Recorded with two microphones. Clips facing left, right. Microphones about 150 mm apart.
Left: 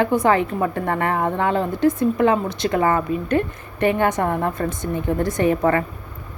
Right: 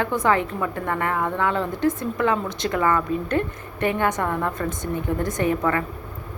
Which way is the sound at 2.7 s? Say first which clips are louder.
Left 2 dB; 30° left (ahead or behind).